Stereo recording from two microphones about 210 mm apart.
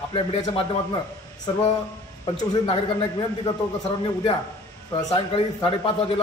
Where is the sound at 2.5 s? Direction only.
25° left (ahead or behind).